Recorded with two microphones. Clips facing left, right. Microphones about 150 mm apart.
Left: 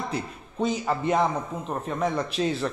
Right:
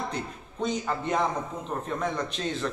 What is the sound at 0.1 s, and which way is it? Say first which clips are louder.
A man's voice: left 3 dB; 5° left (ahead or behind).